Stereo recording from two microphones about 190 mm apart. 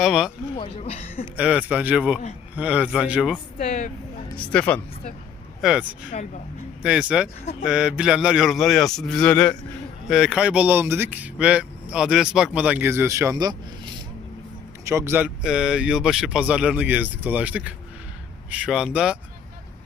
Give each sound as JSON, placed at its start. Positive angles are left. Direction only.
{"t": 0.0, "sound": "speech", "side_deg": 0}
{"t": 0.5, "sound": "speech", "side_deg": 30}
{"t": 1.4, "sound": "speech", "side_deg": -5}
{"t": 3.6, "sound": "speech", "side_deg": 40}
{"t": 4.4, "sound": "speech", "side_deg": 5}
{"t": 5.6, "sound": "speech", "side_deg": -5}